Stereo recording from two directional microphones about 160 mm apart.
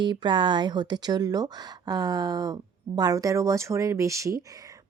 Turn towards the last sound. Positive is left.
turn(degrees=-20)  # may be behind; listen again after turning